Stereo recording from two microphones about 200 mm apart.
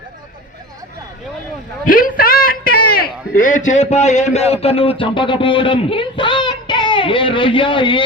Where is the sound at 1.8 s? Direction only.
45° left (ahead or behind).